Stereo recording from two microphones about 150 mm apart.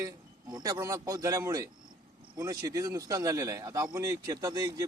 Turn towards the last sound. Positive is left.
turn(degrees=-25)  # may be behind; listen again after turning